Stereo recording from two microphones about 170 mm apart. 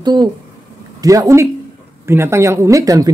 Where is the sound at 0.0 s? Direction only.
25° right (ahead or behind).